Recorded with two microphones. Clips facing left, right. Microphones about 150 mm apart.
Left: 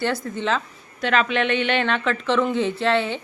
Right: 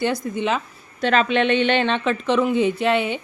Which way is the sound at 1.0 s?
30° right (ahead or behind).